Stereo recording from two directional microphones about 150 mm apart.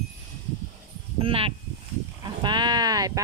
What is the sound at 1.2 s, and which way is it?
A woman's voice, 35° right (ahead or behind).